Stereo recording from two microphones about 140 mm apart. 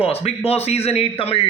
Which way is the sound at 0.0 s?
45° left (ahead or behind).